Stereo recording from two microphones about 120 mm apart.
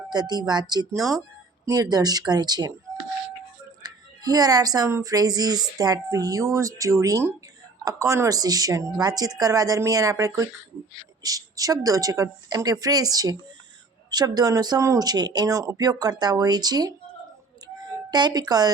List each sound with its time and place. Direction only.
0.1 s speech: 35° right (ahead or behind)
3.8 s a woman's voice: 30° right (ahead or behind)
18.1 s speech: 35° right (ahead or behind)